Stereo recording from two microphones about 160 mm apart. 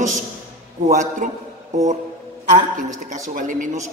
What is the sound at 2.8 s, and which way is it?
Speech, 55° right (ahead or behind).